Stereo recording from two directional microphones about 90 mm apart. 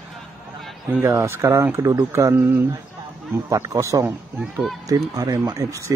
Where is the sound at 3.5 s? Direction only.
35° right (ahead or behind).